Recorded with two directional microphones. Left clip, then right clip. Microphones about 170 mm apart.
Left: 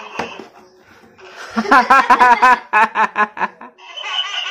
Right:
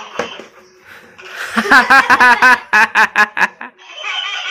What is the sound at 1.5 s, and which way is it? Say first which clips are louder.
Speech: right 2 dB; centre (ahead or behind).